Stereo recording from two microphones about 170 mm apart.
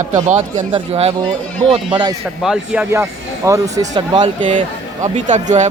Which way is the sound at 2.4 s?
5° right (ahead or behind).